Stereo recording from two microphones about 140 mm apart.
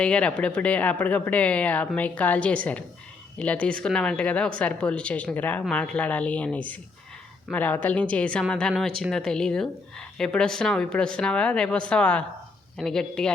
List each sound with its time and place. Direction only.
0.0 s a woman's voice: 10° left (ahead or behind)